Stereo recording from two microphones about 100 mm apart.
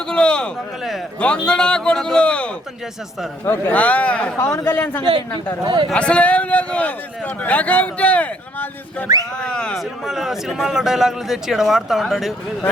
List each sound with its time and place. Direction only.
0.1 s a man's voice: 10° left (ahead or behind)
4.4 s a man's voice: 25° left (ahead or behind)
5.6 s speech: 50° right (ahead or behind)
5.9 s a man's voice: 10° left (ahead or behind)
10.1 s a man's voice: 5° right (ahead or behind)